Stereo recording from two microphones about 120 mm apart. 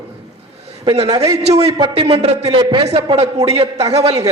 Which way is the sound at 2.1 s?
55° right (ahead or behind).